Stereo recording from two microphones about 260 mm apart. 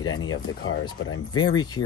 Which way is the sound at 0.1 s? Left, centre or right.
Left.